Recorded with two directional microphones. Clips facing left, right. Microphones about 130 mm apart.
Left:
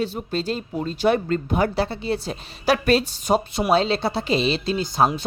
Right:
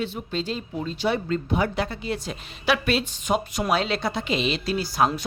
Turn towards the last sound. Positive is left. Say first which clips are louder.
# left 2 dB
turn(degrees=25)  # may be behind; listen again after turning